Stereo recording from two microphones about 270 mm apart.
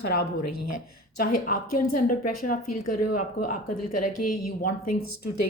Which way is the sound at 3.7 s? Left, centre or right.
Left.